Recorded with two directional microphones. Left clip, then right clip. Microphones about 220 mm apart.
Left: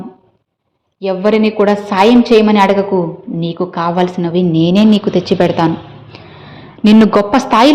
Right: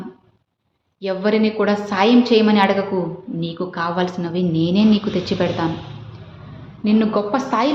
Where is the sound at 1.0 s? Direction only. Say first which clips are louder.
Left 6 dB; 25° left (ahead or behind).